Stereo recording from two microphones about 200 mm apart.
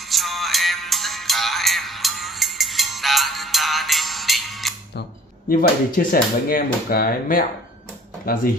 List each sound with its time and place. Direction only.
0.1 s music: centre (ahead or behind)
5.5 s speech: 45° left (ahead or behind)